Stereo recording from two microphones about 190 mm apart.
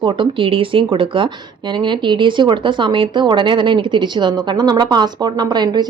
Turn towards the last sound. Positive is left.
turn(degrees=-20)  # may be behind; listen again after turning